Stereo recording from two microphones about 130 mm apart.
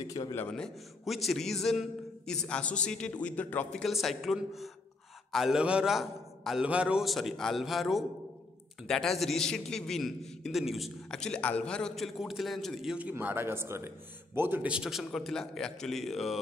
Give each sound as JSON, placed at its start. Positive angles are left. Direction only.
{"t": 0.0, "sound": "a man's voice", "side_deg": 25}
{"t": 0.5, "sound": "a man's voice", "side_deg": 0}
{"t": 3.8, "sound": "a man's voice", "side_deg": 0}